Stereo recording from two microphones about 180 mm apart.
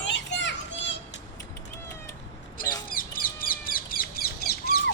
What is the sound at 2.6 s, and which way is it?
Bird, 50° left (ahead or behind).